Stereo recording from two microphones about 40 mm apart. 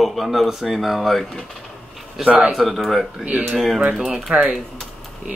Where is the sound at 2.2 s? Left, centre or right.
Right.